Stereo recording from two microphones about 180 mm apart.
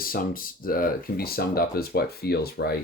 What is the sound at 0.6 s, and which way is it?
Speech, 55° left (ahead or behind).